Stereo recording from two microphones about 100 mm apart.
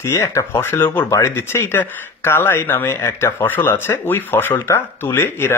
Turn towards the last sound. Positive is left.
turn(degrees=25)  # may be behind; listen again after turning